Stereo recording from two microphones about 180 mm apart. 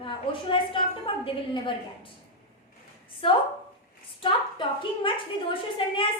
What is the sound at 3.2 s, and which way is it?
A woman's voice, 30° left (ahead or behind).